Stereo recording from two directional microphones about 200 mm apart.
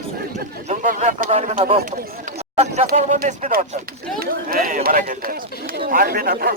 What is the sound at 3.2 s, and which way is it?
Speech, 45° right (ahead or behind).